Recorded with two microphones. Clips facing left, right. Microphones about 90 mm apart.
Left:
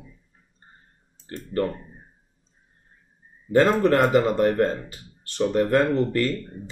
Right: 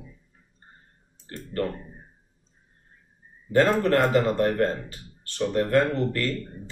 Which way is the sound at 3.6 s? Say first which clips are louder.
Left 2 dB; 20° left (ahead or behind).